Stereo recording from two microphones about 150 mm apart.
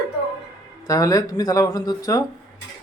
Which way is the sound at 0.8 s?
20° left (ahead or behind).